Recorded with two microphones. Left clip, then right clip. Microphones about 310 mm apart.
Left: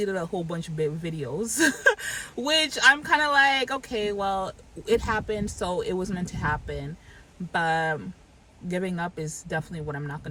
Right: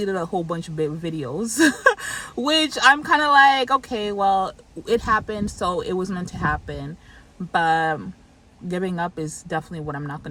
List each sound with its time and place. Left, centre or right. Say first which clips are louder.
0.0 s speech: right 4 dB; centre